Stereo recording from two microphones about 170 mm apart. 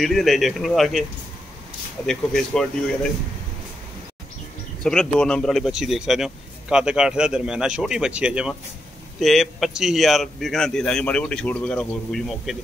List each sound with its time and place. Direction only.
0.0 s speech: centre (ahead or behind)
2.0 s speech: 5° left (ahead or behind)
4.8 s speech: 5° left (ahead or behind)